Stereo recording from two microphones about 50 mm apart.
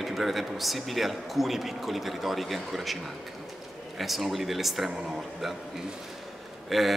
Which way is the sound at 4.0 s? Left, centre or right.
Centre.